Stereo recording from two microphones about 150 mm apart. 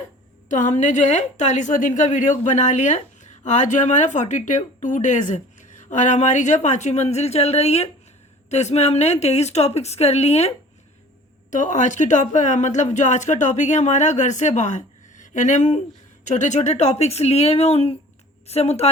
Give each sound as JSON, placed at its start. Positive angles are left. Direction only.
{"t": 0.5, "sound": "a woman's voice", "side_deg": 55}
{"t": 11.5, "sound": "a woman's voice", "side_deg": 55}